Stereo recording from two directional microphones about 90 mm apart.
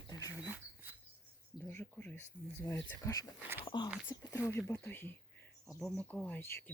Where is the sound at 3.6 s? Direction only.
60° left (ahead or behind).